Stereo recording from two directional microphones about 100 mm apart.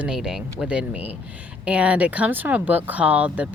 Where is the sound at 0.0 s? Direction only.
5° right (ahead or behind).